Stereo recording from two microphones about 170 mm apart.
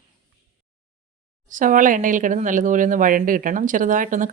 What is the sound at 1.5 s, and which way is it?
Speech, 50° right (ahead or behind).